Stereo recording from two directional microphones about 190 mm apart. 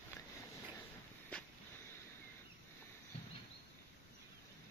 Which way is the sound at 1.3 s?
5° left (ahead or behind).